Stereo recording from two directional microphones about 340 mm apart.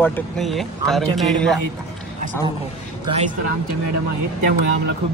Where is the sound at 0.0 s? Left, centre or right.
Centre.